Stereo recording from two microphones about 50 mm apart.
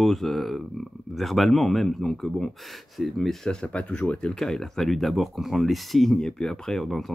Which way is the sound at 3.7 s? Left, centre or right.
Left.